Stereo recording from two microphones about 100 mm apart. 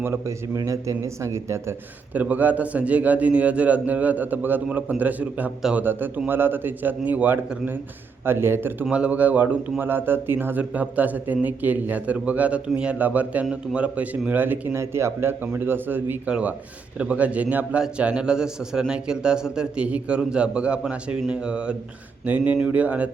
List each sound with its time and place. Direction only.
0.0 s a man's voice: 20° right (ahead or behind)
0.5 s a man's voice: 35° right (ahead or behind)
2.1 s a man's voice: 15° right (ahead or behind)
8.8 s a man's voice: 10° right (ahead or behind)